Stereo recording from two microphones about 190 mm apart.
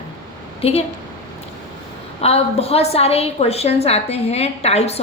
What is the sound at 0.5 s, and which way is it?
Speech, 30° left (ahead or behind).